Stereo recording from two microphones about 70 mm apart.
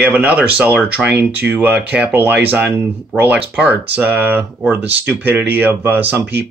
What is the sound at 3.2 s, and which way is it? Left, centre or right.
Speech, centre.